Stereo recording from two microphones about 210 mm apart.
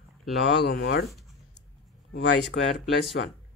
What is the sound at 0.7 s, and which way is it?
Speech, 50° left (ahead or behind).